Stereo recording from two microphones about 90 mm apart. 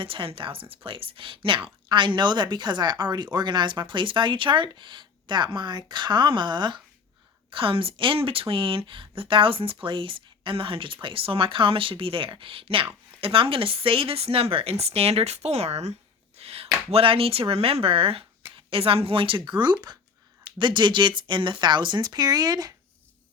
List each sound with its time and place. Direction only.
0.0 s speech: 80° right; by 6.8 s 60° right (ahead or behind)
7.5 s speech: 75° right (ahead or behind); by 15.0 s 90° right
16.9 s speech: 90° right; by 22.7 s 45° right (ahead or behind)